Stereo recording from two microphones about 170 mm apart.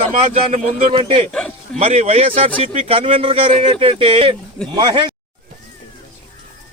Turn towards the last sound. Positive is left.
turn(degrees=-25)  # may be behind; listen again after turning